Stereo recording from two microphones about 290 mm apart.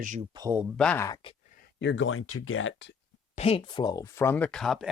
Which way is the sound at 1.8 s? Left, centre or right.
Left.